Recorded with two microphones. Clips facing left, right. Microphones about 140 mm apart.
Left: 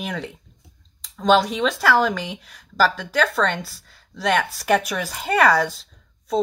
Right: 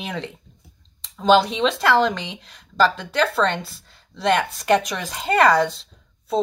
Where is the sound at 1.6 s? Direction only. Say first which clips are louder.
Right 1 dB; 5° left (ahead or behind).